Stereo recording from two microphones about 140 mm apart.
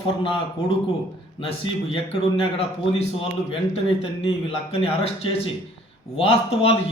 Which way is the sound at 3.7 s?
50° left (ahead or behind).